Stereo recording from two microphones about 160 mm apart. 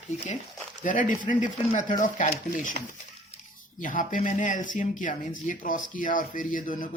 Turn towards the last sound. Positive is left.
turn(degrees=55)  # may be behind; listen again after turning